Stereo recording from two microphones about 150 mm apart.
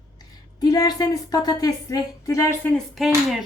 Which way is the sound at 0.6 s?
25° left (ahead or behind).